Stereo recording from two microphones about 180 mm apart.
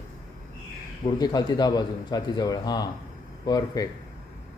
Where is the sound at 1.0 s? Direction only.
20° left (ahead or behind).